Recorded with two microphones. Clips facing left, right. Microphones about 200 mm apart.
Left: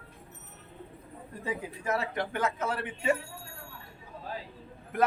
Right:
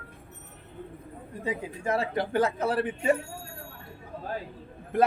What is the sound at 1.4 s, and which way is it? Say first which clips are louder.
A man's voice: right 3 dB; 25° right (ahead or behind).